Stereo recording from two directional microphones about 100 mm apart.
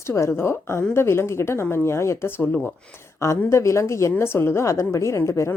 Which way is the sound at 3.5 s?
30° left (ahead or behind).